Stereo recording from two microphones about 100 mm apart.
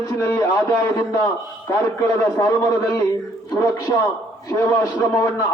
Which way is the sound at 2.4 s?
40° left (ahead or behind).